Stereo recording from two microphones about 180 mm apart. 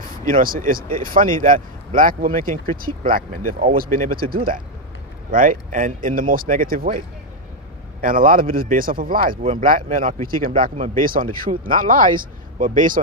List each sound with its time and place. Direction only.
0.3 s speech: 50° right (ahead or behind)
8.0 s speech: 50° right (ahead or behind)